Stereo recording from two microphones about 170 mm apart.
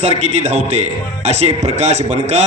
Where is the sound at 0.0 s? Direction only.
40° right (ahead or behind).